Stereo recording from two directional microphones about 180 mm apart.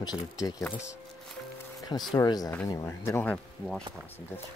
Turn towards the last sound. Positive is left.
turn(degrees=10)  # may be behind; listen again after turning